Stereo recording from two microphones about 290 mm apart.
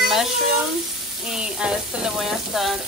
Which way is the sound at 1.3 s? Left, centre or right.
Centre.